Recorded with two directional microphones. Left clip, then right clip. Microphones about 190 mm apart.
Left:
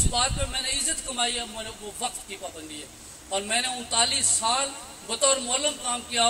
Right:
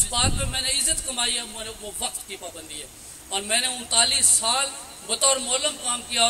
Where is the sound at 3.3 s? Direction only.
50° right (ahead or behind).